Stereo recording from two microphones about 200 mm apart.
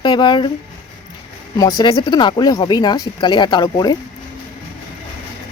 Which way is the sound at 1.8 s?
25° left (ahead or behind).